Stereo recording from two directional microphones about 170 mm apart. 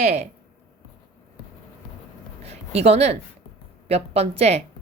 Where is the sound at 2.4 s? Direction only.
40° right (ahead or behind).